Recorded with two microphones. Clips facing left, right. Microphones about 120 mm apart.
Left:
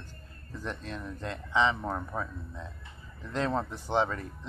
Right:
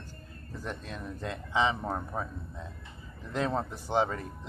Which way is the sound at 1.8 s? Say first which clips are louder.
Even; 25° right (ahead or behind).